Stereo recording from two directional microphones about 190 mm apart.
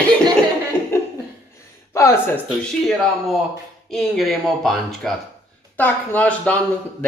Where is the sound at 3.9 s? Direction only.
Centre (ahead or behind).